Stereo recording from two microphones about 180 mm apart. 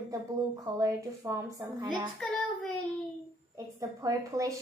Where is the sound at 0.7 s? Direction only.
15° right (ahead or behind).